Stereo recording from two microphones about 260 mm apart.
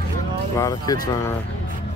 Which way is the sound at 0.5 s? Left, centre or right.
Centre.